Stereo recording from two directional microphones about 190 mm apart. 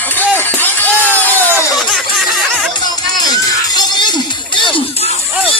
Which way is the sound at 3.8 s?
20° left (ahead or behind).